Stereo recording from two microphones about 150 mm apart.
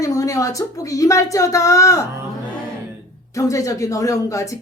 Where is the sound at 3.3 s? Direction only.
20° left (ahead or behind).